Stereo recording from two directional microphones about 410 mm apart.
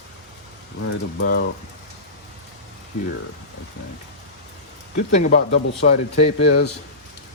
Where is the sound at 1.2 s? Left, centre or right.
Left.